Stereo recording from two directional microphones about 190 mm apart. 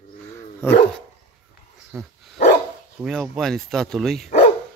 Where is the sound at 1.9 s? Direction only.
15° right (ahead or behind).